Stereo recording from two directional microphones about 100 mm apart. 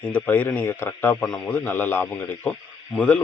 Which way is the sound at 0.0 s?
20° left (ahead or behind).